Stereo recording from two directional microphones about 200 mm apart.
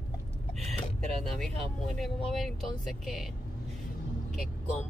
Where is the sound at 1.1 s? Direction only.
Centre (ahead or behind).